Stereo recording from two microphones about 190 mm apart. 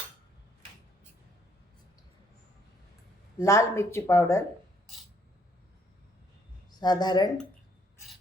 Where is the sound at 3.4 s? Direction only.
15° left (ahead or behind).